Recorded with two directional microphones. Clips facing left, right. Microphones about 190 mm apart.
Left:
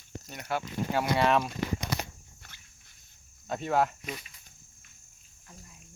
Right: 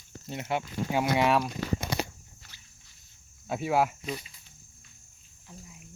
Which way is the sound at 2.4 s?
55° left (ahead or behind).